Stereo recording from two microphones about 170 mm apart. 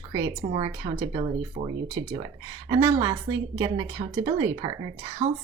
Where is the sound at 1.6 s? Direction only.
50° right (ahead or behind).